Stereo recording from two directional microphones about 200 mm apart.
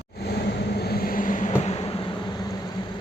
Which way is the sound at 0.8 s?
50° left (ahead or behind).